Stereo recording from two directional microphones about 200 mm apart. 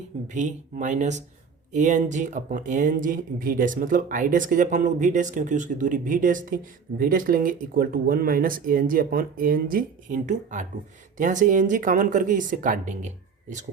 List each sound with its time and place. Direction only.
0.3 s speech: 35° right (ahead or behind)